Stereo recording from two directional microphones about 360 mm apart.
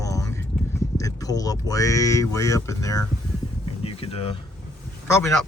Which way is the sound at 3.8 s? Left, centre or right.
Centre.